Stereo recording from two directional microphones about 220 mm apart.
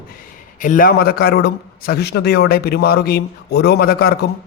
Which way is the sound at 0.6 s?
40° left (ahead or behind).